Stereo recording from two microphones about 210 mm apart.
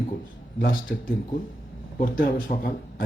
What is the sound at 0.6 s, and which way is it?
A man's voice, 45° left (ahead or behind).